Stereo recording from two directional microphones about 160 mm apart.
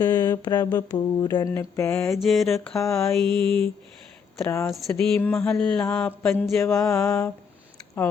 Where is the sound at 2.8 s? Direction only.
15° left (ahead or behind).